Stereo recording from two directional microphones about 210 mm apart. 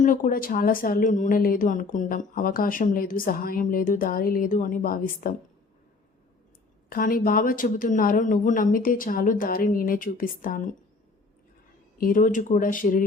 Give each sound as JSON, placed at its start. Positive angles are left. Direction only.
{"t": 0.0, "sound": "speech", "side_deg": 40}
{"t": 6.9, "sound": "speech", "side_deg": 40}
{"t": 11.9, "sound": "speech", "side_deg": 40}